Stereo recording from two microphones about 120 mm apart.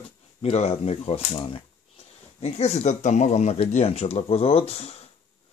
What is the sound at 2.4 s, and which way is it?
Speech, 60° left (ahead or behind).